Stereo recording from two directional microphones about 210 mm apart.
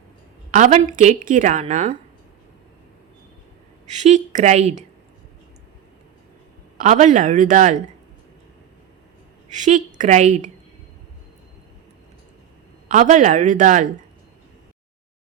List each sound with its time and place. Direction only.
0.5 s a woman's voice: 35° right (ahead or behind)
3.8 s a woman's voice: 35° right (ahead or behind)
6.8 s a woman's voice: 35° right (ahead or behind)
9.5 s a woman's voice: 35° right (ahead or behind)
12.9 s a woman's voice: 35° right (ahead or behind)